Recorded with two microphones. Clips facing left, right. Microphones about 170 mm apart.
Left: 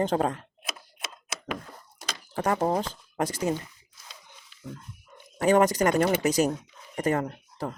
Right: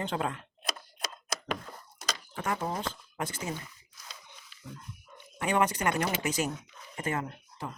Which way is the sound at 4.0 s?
30° left (ahead or behind).